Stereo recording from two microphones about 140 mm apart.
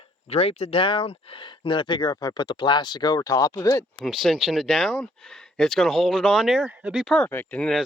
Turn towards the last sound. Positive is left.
turn(degrees=5)  # may be behind; listen again after turning